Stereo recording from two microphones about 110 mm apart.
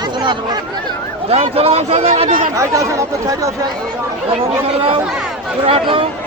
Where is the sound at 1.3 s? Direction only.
65° right (ahead or behind).